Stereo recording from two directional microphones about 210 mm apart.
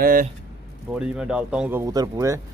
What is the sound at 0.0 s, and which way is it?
Speech, 40° right (ahead or behind).